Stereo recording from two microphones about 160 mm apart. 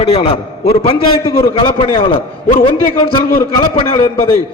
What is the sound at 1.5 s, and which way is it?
A man's voice, 30° left (ahead or behind).